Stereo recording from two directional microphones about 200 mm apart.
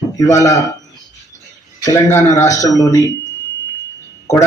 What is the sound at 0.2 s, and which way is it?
Speech, 15° left (ahead or behind).